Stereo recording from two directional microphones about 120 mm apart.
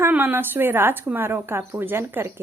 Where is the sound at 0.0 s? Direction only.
15° right (ahead or behind).